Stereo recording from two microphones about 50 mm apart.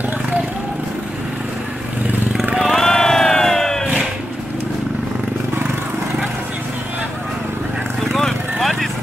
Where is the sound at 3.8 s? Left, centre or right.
Centre.